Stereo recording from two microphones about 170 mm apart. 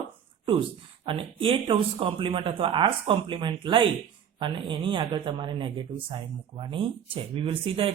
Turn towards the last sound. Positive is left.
turn(degrees=-35)  # may be behind; listen again after turning